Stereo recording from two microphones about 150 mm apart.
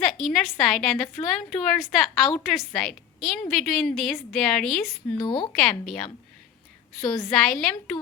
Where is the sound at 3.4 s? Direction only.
Centre (ahead or behind).